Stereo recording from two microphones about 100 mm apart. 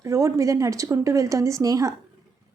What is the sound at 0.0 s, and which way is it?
A woman's voice, 30° right (ahead or behind).